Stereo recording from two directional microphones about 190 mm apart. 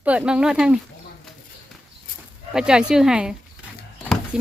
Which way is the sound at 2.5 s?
5° right (ahead or behind).